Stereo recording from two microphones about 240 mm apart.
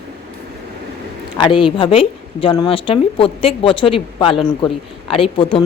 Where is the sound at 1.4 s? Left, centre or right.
Left.